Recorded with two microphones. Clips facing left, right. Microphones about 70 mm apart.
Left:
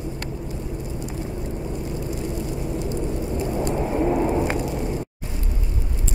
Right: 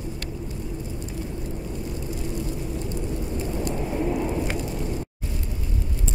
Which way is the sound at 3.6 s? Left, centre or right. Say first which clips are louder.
Left 5 dB; left.